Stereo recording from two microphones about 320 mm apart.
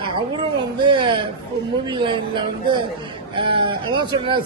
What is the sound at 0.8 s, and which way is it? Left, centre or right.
A man's voice, centre.